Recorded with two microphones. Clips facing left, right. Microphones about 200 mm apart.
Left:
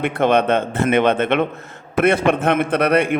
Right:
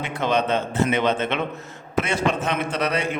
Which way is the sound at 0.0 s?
55° left (ahead or behind).